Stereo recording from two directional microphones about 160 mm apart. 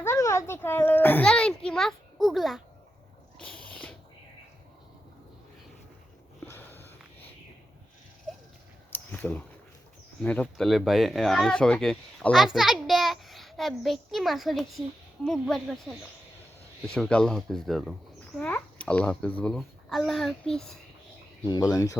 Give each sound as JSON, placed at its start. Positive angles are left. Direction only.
{"t": 0.0, "sound": "a child's voice", "side_deg": 15}
{"t": 6.5, "sound": "sniff", "side_deg": 15}
{"t": 8.9, "sound": "a sound", "side_deg": 10}
{"t": 10.2, "sound": "speech", "side_deg": 10}
{"t": 18.3, "sound": "speech", "side_deg": 10}
{"t": 21.4, "sound": "speech", "side_deg": 25}